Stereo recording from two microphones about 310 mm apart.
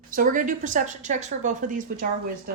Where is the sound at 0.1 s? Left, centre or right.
Right.